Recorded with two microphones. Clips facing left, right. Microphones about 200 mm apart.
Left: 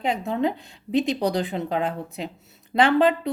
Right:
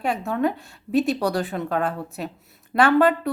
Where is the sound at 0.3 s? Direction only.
20° left (ahead or behind).